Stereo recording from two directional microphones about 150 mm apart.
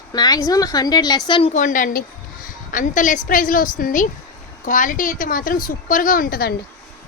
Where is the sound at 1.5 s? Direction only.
60° left (ahead or behind).